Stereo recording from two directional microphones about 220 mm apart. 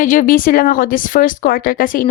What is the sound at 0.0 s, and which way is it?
Speech, 35° left (ahead or behind).